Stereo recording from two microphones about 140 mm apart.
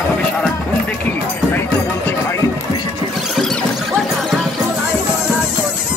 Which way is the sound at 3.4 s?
5° left (ahead or behind).